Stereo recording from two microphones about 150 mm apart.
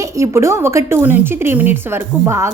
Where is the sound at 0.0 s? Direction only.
20° right (ahead or behind).